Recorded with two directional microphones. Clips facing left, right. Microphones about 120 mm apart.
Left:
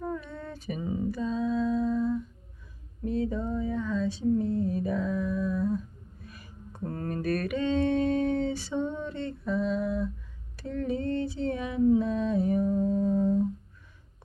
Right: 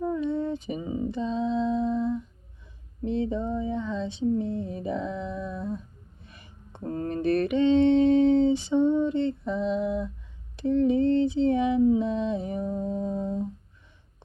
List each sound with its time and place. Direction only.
0.0 s female singing: 20° right (ahead or behind)
6.2 s mantra: 25° right (ahead or behind)
10.6 s female singing: 20° right (ahead or behind)
11.9 s humming: 20° right (ahead or behind)